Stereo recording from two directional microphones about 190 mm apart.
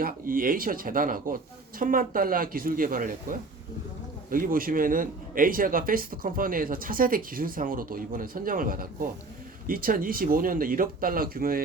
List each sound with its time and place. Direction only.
0.0 s a man's voice: 45° right (ahead or behind)